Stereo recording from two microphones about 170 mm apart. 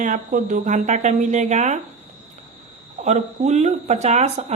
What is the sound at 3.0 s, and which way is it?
Speech, 40° right (ahead or behind).